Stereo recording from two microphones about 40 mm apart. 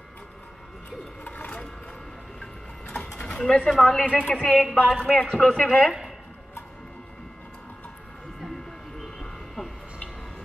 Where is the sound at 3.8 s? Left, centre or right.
Centre.